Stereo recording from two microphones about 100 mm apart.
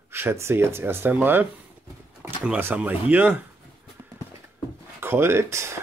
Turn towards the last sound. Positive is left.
turn(degrees=-25)  # may be behind; listen again after turning